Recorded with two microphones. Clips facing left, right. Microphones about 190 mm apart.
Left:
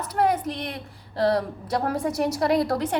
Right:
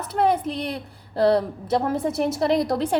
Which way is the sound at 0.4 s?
35° right (ahead or behind).